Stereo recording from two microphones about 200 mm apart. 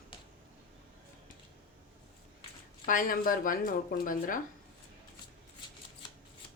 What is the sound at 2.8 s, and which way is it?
Speech, 45° left (ahead or behind).